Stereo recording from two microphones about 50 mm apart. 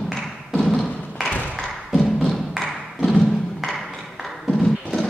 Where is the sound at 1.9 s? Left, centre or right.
Centre.